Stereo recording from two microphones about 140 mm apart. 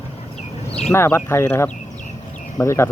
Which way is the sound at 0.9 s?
20° left (ahead or behind).